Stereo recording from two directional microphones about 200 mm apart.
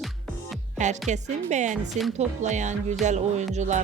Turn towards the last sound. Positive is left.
turn(degrees=-35)  # may be behind; listen again after turning